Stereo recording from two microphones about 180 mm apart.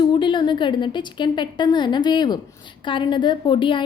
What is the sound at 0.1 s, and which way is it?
A woman's voice, 25° left (ahead or behind).